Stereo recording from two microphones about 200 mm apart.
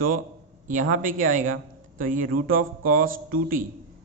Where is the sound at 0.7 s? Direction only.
40° right (ahead or behind).